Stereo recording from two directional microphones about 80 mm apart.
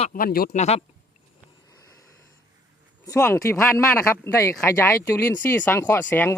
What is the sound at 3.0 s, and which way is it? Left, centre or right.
Speech, left.